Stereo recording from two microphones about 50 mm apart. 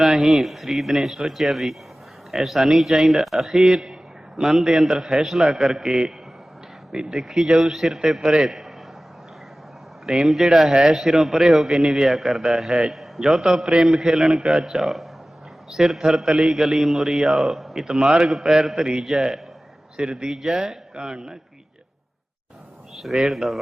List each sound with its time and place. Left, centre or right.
0.0 s a man's voice: centre
10.2 s speech: centre
11.7 s a man's voice: centre
12.0 s a man's voice: centre
18.9 s a man's voice: centre
19.1 s a man's voice: centre
23.1 s speech: centre